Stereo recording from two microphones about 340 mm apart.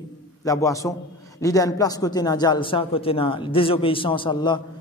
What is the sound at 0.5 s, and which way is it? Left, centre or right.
Speech, centre.